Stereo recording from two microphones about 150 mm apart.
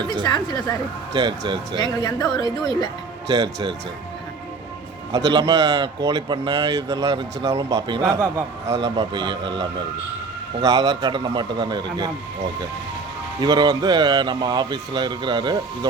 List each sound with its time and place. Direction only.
0.3 s a woman's voice: 25° left (ahead or behind)
1.8 s a woman's voice: 25° left (ahead or behind)
3.2 s a man's voice: 25° right (ahead or behind)
5.1 s a man's voice: 25° right (ahead or behind)
13.4 s a man's voice: 25° right (ahead or behind)